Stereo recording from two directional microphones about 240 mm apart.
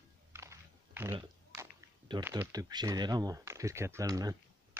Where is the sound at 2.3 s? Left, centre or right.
Centre.